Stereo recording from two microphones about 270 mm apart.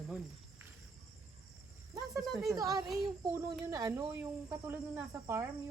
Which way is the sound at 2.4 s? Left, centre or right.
Centre.